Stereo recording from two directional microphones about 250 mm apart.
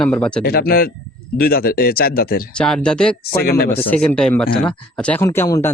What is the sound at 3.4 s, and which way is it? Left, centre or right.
Speech, left.